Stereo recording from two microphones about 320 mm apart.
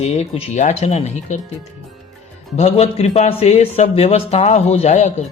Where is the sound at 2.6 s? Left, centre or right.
Centre.